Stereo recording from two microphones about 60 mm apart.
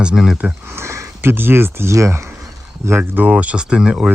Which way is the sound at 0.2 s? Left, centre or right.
Centre.